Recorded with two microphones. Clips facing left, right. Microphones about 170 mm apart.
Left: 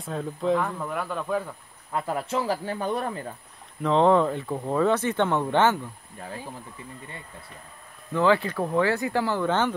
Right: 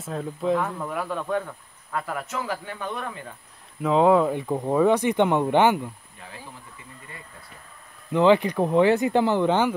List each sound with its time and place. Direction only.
0.0 s speech: centre (ahead or behind)
1.9 s speech: 25° left (ahead or behind)
3.8 s speech: 5° right (ahead or behind)
8.1 s speech: 20° right (ahead or behind)